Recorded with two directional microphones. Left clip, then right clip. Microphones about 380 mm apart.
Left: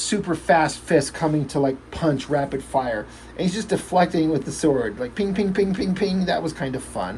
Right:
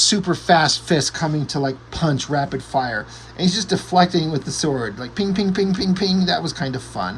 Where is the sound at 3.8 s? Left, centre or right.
Centre.